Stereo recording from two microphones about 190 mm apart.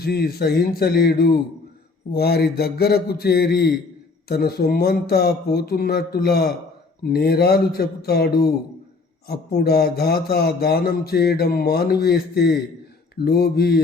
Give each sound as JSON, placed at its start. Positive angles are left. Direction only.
{"t": 0.0, "sound": "speech", "side_deg": 55}